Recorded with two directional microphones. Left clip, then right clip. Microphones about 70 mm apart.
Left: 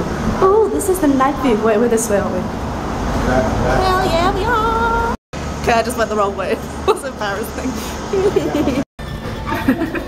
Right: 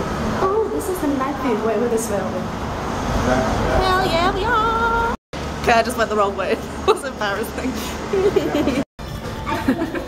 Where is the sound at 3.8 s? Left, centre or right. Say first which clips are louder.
Left 2 dB; centre.